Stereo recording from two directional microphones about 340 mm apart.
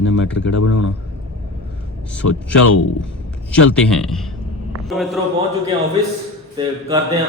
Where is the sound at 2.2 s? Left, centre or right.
Left.